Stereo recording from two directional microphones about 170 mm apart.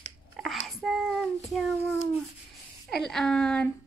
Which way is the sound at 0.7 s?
Centre (ahead or behind).